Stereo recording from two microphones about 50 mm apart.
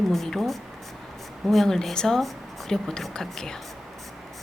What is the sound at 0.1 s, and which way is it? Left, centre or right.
Speech, centre.